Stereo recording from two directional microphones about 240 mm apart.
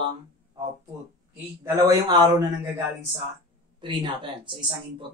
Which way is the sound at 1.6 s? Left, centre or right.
Centre.